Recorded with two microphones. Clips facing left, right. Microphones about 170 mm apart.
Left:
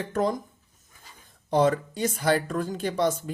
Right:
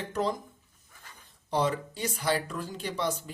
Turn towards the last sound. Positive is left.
turn(degrees=50)  # may be behind; listen again after turning